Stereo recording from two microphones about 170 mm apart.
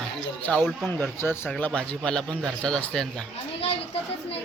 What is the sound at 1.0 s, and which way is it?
A man's voice, 15° left (ahead or behind).